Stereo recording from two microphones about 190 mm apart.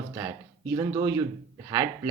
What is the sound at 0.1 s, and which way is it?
Speech, 15° right (ahead or behind).